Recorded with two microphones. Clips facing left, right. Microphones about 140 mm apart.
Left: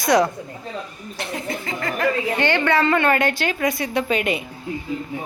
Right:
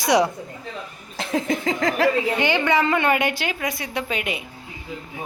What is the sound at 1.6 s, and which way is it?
Speech, 90° right.